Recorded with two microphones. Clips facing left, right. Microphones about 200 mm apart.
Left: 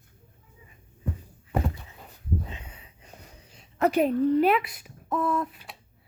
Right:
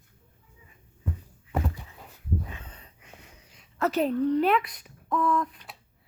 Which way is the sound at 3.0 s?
40° left (ahead or behind).